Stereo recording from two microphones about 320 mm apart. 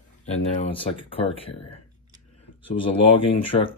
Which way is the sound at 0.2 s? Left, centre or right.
Centre.